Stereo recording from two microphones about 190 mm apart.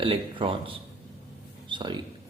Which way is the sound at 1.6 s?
25° right (ahead or behind).